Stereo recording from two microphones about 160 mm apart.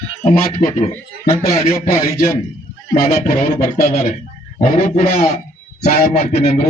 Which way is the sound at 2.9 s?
70° left (ahead or behind).